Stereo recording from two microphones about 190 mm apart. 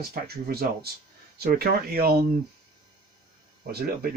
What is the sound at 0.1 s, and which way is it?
Speech, 55° right (ahead or behind).